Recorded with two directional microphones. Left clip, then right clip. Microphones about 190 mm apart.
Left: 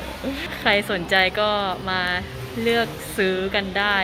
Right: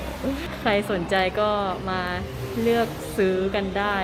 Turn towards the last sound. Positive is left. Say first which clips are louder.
# left 3 dB
turn(degrees=0)  # may be behind; listen again after turning